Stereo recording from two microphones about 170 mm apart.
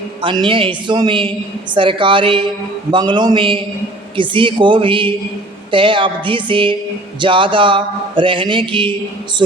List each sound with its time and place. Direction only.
0.2 s speech: 30° right (ahead or behind)
5.7 s music: 30° right (ahead or behind)
7.2 s speech: 30° right (ahead or behind)